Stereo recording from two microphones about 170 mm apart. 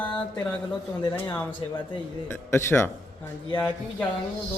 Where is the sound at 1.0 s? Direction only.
25° left (ahead or behind); by 4.1 s 5° left (ahead or behind).